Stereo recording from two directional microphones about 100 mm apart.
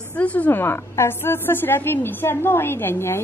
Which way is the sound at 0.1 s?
15° left (ahead or behind).